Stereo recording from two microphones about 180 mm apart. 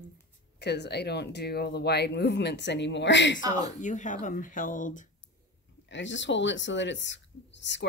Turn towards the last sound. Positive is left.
turn(degrees=80)